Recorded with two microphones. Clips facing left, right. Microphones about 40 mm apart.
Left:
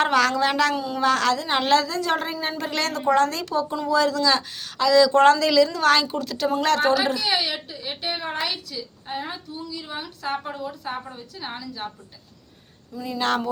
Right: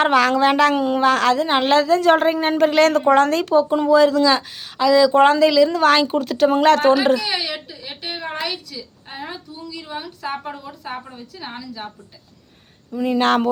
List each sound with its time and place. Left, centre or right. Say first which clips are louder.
0.0 s a woman's voice: right 4 dB; right
2.0 s a woman's voice: right 9 dB; right
7.3 s a woman's voice: even; centre
12.9 s speech: right 7 dB; right